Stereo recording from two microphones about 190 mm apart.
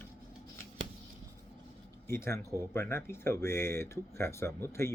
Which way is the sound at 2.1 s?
15° left (ahead or behind).